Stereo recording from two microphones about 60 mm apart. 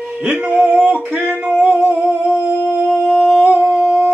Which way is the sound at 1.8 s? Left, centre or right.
Right.